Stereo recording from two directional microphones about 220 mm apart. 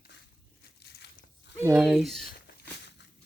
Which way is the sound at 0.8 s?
45° left (ahead or behind).